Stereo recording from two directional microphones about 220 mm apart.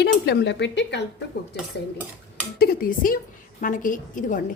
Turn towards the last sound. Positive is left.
turn(degrees=35)  # may be behind; listen again after turning